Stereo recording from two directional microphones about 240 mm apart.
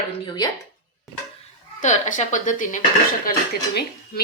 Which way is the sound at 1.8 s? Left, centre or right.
Left.